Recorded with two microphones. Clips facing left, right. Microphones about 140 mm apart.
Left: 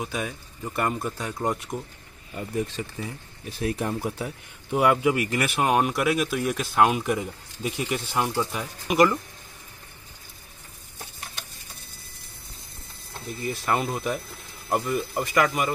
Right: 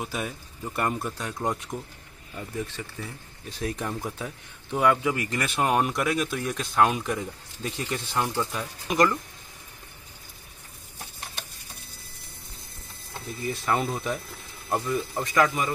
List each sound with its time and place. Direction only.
0.0 s speech: centre (ahead or behind)
2.3 s speech: 15° left (ahead or behind)
3.4 s speech: 10° left (ahead or behind)
13.5 s speech: centre (ahead or behind)